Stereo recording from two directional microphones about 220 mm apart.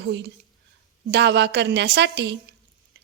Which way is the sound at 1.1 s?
50° right (ahead or behind).